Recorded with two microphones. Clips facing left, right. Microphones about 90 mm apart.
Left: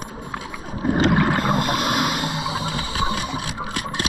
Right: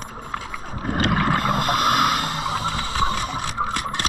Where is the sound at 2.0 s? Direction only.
5° left (ahead or behind).